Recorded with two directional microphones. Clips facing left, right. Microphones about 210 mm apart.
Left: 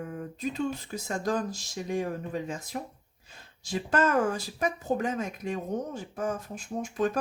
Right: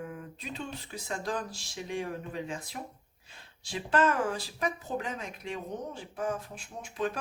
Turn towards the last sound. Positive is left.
turn(degrees=45)  # may be behind; listen again after turning